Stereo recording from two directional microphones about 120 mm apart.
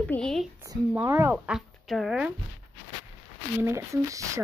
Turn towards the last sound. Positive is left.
turn(degrees=-25)  # may be behind; listen again after turning